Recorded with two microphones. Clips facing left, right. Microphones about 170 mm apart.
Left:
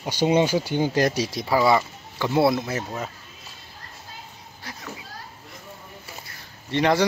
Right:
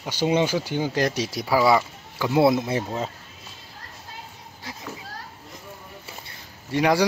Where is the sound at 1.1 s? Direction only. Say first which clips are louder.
Even; centre (ahead or behind); by 3.0 s 25° right (ahead or behind).